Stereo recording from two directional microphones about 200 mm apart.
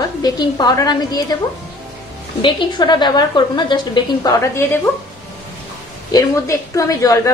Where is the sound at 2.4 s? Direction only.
25° left (ahead or behind).